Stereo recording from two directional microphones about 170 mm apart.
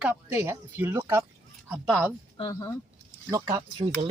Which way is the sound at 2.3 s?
25° left (ahead or behind).